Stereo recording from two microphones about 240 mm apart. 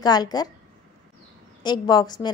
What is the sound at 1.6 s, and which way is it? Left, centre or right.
Speech, centre.